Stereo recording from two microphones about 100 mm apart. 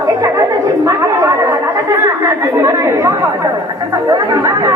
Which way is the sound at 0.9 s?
30° right (ahead or behind).